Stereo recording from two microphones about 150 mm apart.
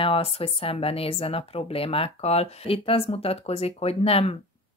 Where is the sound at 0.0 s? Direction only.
40° left (ahead or behind).